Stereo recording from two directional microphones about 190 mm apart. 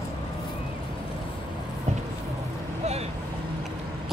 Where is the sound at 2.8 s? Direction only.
35° right (ahead or behind).